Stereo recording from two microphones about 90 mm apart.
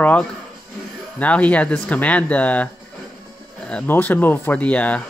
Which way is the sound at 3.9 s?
20° left (ahead or behind).